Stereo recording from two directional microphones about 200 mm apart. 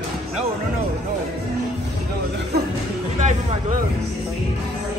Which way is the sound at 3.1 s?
40° right (ahead or behind).